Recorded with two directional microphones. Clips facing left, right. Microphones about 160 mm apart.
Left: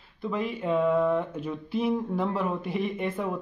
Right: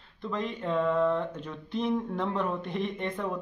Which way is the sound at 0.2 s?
5° left (ahead or behind).